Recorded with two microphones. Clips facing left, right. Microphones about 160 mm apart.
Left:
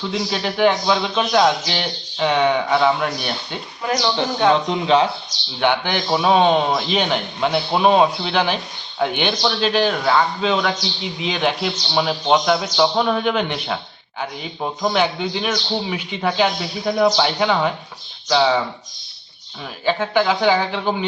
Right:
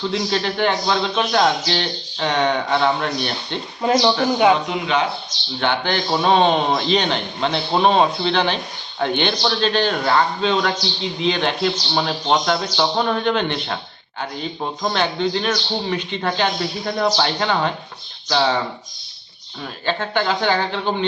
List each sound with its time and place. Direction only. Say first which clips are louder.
0.1 s speech: right 1 dB; 5° left (ahead or behind)
3.8 s speech: right 5 dB; 25° right (ahead or behind)
4.4 s speech: left 2 dB; 10° right (ahead or behind)
4.7 s speech: left 4 dB; 30° left (ahead or behind)
5.5 s a man's voice: left 1 dB; 15° left (ahead or behind)
14.9 s speech: right 2 dB; 10° left (ahead or behind)
19.8 s speech: left 3 dB; 10° left (ahead or behind)